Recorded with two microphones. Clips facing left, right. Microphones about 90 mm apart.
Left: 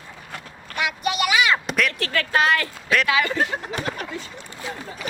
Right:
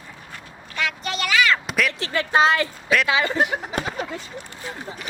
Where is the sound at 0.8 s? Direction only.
15° left (ahead or behind).